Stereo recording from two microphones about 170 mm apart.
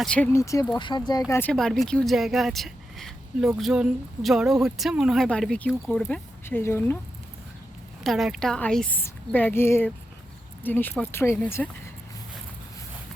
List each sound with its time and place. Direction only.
0.0 s speech: 5° left (ahead or behind)
0.3 s speech: 20° left (ahead or behind)
1.3 s speech: 10° left (ahead or behind)
8.0 s a woman's voice: centre (ahead or behind)